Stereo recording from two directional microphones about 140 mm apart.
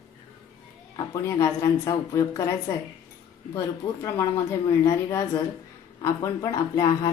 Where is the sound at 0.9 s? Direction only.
25° left (ahead or behind).